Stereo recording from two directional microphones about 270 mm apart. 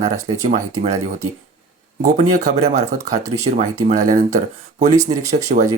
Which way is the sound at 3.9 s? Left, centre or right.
Right.